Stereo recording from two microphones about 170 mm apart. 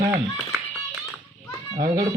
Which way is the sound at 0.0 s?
15° right (ahead or behind).